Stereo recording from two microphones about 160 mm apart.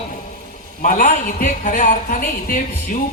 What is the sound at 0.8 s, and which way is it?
A man's voice, 55° left (ahead or behind).